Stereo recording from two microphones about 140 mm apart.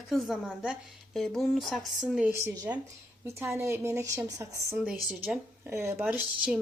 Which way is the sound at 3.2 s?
20° right (ahead or behind).